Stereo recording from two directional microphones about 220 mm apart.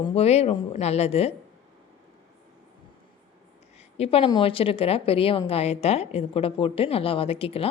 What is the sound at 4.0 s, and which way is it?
A woman's voice, 25° left (ahead or behind).